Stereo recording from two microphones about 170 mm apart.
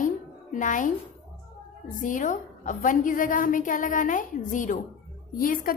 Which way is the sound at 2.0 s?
50° left (ahead or behind).